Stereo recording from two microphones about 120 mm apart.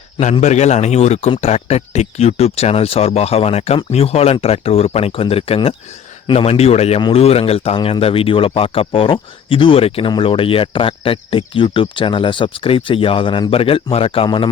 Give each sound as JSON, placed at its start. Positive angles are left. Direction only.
{"t": 0.4, "sound": "speech", "side_deg": 70}